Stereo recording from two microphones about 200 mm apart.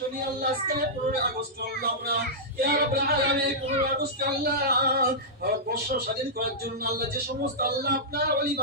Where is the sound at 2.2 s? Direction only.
50° right (ahead or behind).